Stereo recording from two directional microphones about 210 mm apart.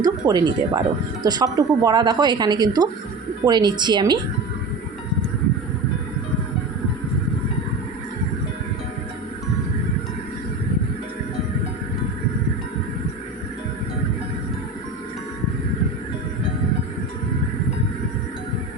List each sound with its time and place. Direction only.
0.3 s speech: 20° right (ahead or behind)